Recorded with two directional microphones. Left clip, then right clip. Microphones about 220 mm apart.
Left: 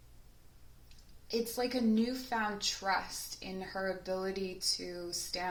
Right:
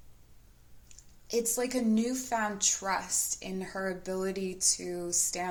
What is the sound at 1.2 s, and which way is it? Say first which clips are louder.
A woman's voice: right 4 dB; 45° right (ahead or behind).